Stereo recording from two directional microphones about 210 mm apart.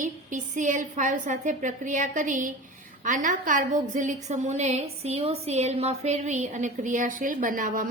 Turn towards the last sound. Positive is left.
turn(degrees=-40)  # may be behind; listen again after turning